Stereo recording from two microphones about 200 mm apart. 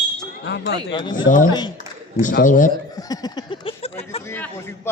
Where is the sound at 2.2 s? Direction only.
40° left (ahead or behind).